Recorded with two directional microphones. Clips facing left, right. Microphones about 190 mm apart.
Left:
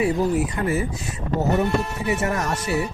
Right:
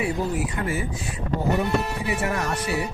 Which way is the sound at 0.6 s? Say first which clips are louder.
Left 4 dB; 35° left (ahead or behind).